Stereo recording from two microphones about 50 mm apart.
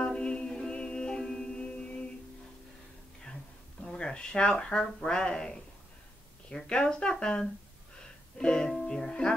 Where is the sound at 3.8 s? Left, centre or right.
Centre.